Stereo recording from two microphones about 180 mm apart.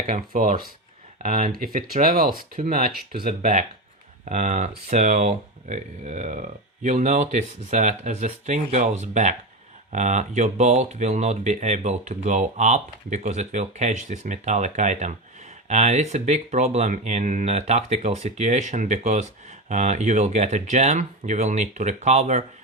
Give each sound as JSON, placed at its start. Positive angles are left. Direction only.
{"t": 0.1, "sound": "speech", "side_deg": -50}